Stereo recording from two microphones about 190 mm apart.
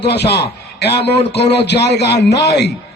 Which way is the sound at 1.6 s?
60° left (ahead or behind).